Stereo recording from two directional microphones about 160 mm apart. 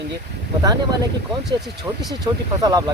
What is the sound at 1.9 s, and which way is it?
Speech, 20° right (ahead or behind).